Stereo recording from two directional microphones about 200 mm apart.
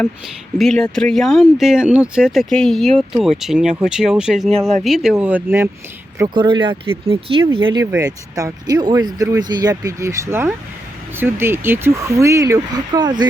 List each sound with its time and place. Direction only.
0.6 s speech: centre (ahead or behind)
6.1 s speech: 20° right (ahead or behind)